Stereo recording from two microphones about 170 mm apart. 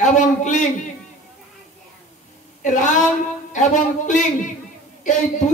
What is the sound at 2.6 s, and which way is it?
Speech, 45° left (ahead or behind).